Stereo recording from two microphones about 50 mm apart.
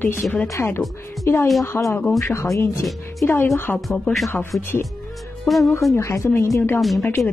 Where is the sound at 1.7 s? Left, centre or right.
Left.